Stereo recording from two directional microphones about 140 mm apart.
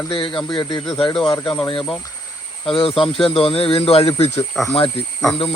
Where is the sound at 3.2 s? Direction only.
40° left (ahead or behind).